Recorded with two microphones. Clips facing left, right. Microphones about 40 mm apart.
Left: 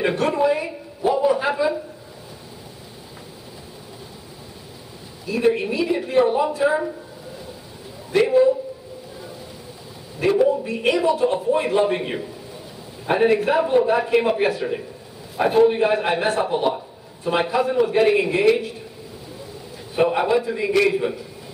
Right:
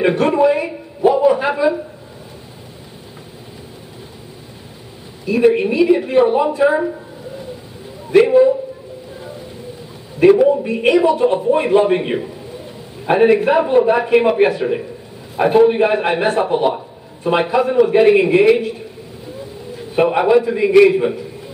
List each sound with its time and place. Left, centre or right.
0.0 s a sound: centre
5.2 s a man's voice: centre
8.1 s a man's voice: centre
10.2 s a man's voice: centre
20.0 s a man's voice: centre